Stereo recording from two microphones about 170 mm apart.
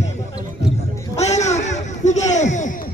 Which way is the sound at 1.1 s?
40° left (ahead or behind).